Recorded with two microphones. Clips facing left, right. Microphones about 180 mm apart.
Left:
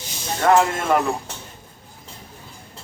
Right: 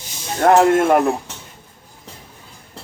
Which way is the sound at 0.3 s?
55° right (ahead or behind).